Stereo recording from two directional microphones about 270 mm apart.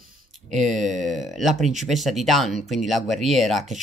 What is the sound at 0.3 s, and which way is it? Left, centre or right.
Speech, centre.